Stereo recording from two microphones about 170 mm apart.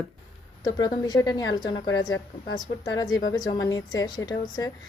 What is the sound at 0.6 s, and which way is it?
A woman's voice, 25° left (ahead or behind).